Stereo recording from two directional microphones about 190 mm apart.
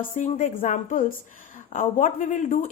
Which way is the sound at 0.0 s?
45° left (ahead or behind).